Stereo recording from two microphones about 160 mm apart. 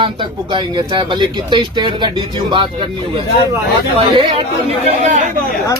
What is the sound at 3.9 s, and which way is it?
Speech, 35° right (ahead or behind).